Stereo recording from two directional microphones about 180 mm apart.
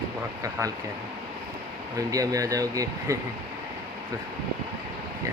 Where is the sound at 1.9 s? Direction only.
20° right (ahead or behind).